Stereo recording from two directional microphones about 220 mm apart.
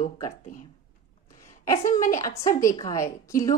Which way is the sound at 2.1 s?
15° left (ahead or behind).